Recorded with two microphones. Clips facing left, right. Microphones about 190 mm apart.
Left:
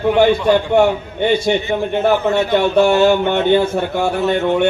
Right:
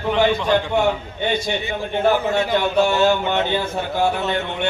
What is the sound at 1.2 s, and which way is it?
A man's voice, 55° left (ahead or behind).